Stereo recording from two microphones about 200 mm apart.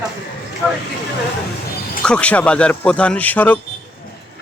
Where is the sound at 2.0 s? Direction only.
5° left (ahead or behind).